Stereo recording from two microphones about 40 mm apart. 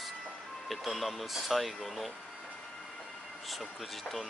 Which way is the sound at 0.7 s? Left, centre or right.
Centre.